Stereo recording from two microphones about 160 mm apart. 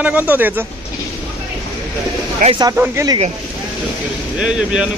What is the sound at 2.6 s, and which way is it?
Speech, 20° right (ahead or behind).